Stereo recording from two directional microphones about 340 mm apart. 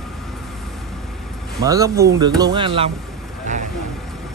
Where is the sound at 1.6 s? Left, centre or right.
Centre.